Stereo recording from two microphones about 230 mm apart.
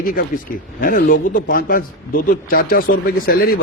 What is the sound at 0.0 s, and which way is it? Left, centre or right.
A man's voice, left.